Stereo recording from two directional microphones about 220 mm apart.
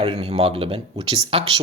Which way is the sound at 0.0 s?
25° right (ahead or behind).